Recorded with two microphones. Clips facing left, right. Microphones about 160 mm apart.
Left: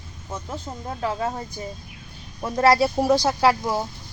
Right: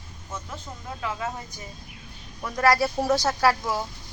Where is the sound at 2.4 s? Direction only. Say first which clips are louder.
Left 4 dB; 25° left (ahead or behind).